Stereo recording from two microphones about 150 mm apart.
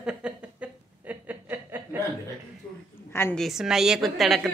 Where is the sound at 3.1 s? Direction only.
15° left (ahead or behind).